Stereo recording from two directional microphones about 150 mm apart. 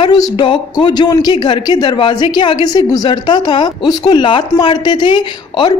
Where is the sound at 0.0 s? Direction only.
30° left (ahead or behind).